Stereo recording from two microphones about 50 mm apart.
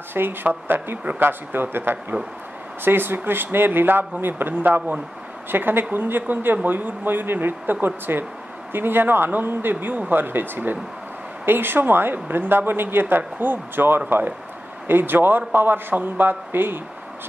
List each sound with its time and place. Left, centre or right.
0.1 s speech: right